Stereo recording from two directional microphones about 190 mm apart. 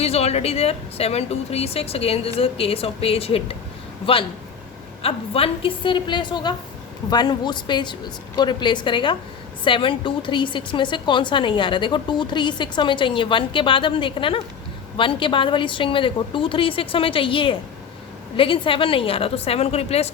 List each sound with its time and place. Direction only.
0.0 s a woman's voice: 35° left (ahead or behind)